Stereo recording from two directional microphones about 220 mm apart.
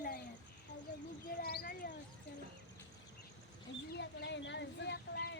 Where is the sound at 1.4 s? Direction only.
45° left (ahead or behind).